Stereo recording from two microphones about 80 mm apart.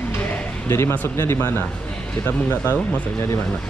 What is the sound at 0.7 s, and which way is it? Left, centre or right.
Speech, left.